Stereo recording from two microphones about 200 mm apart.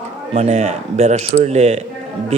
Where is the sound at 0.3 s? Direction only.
35° right (ahead or behind).